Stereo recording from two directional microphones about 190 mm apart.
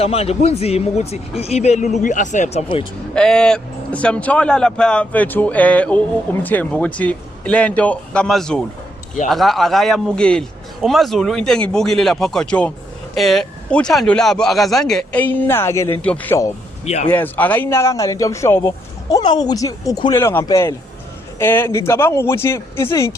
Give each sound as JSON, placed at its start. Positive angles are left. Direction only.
{"t": 0.0, "sound": "speech", "side_deg": 35}
{"t": 3.2, "sound": "speech", "side_deg": 5}
{"t": 16.8, "sound": "speech", "side_deg": 35}
{"t": 17.1, "sound": "speech", "side_deg": 10}